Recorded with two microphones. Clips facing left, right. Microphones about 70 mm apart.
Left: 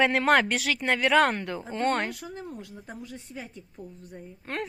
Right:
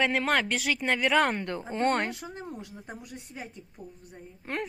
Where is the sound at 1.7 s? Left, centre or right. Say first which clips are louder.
Even; right.